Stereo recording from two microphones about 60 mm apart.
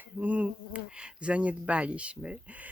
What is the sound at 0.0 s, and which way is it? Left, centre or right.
Speech, right.